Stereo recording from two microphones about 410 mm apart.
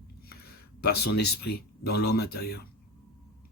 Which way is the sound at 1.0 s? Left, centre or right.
Left.